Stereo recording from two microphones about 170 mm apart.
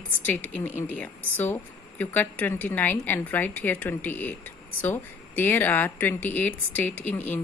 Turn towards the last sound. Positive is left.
turn(degrees=10)  # may be behind; listen again after turning